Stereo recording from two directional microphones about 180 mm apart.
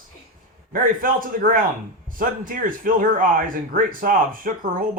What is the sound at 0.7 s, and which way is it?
Speech, 50° right (ahead or behind).